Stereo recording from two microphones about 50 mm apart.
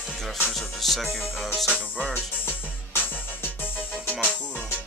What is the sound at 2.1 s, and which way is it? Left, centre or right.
Music, left.